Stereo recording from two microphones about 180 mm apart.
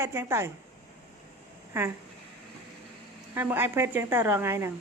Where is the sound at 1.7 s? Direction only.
10° right (ahead or behind).